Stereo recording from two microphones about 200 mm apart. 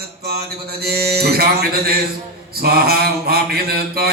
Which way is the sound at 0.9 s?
50° right (ahead or behind).